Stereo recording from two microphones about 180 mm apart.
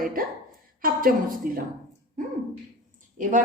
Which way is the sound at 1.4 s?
50° right (ahead or behind).